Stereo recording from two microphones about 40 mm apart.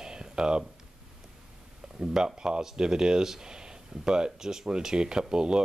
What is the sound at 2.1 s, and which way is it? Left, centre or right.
Speech, centre.